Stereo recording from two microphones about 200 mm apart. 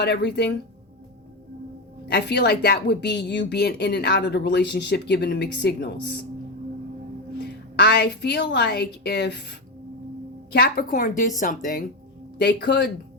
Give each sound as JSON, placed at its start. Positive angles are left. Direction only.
{"t": 0.0, "sound": "a woman's voice", "side_deg": 55}
{"t": 2.0, "sound": "a woman's voice", "side_deg": 55}
{"t": 7.8, "sound": "a woman's voice", "side_deg": 60}
{"t": 12.4, "sound": "a woman's voice", "side_deg": 55}